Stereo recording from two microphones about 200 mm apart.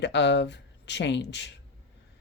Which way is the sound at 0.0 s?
60° left (ahead or behind).